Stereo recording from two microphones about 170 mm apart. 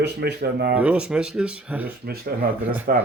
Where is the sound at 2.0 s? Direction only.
65° right (ahead or behind).